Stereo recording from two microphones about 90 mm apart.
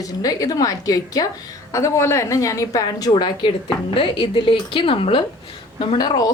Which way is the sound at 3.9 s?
70° left (ahead or behind).